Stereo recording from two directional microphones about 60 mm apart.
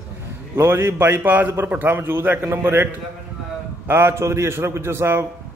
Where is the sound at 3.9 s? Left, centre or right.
Right.